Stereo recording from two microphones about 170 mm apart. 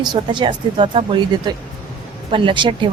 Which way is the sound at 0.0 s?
25° right (ahead or behind).